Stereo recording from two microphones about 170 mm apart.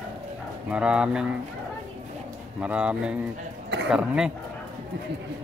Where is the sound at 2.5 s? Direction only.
5° right (ahead or behind).